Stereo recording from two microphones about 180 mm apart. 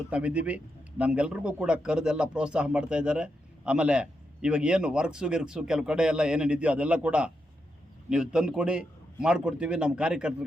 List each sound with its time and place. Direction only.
0.1 s a man's voice: 5° right (ahead or behind)